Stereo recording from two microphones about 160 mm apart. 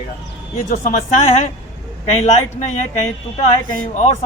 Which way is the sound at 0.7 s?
55° left (ahead or behind).